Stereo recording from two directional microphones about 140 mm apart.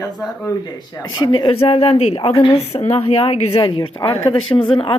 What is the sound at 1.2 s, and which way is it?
A woman's voice, 35° left (ahead or behind).